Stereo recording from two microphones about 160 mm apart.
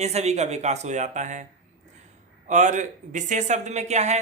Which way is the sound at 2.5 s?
50° right (ahead or behind).